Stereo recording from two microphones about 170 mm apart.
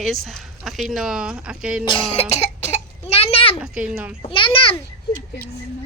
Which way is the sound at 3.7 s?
5° right (ahead or behind).